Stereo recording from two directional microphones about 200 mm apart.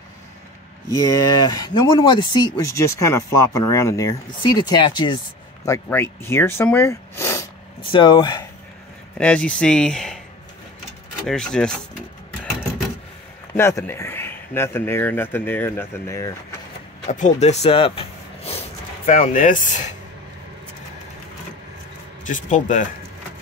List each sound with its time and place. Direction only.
0.9 s speech: 20° left (ahead or behind)
5.7 s a man's voice: 10° left (ahead or behind)
9.2 s speech: 5° left (ahead or behind)
11.2 s speech: 5° left (ahead or behind)
13.6 s a man's voice: 10° left (ahead or behind)
17.1 s speech: 35° left (ahead or behind)
19.0 s speech: 40° left (ahead or behind)
22.2 s speech: 40° left (ahead or behind)